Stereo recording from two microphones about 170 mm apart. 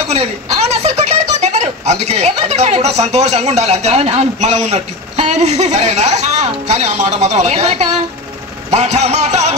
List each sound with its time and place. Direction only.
0.1 s speech: 40° right (ahead or behind)